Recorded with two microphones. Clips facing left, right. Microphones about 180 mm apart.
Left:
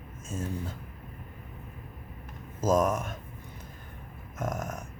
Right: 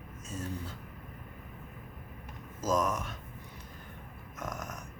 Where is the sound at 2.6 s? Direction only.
50° left (ahead or behind).